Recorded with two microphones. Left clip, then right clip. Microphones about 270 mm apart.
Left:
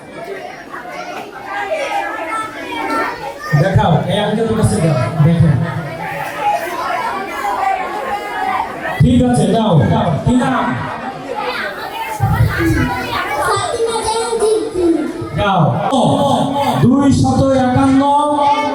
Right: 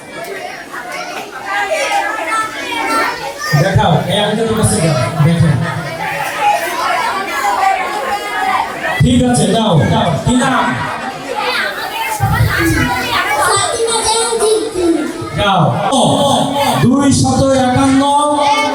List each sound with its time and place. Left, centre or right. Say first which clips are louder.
1.7 s children playing: right 2 dB; centre
3.5 s speech: right 2 dB; centre
6.4 s chatter: right 3 dB; centre
9.8 s speech: right 2 dB; centre
11.3 s children playing: right 5 dB; centre
15.6 s a sound: right 2 dB; centre
16.0 s speech: right 2 dB; left
16.5 s a sound: right 2 dB; centre
17.2 s a sound: right 1 dB; left
17.5 s music: right 1 dB; centre
18.1 s music: right 1 dB; left
18.3 s female singing: right 1 dB; centre